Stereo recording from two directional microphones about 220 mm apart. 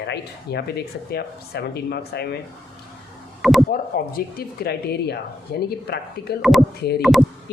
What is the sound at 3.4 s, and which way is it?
Speech, centre (ahead or behind).